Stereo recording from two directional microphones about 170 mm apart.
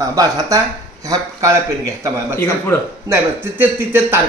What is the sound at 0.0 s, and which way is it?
Speech, 20° right (ahead or behind).